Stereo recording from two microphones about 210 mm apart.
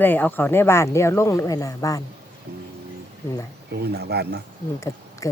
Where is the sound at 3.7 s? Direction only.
50° right (ahead or behind).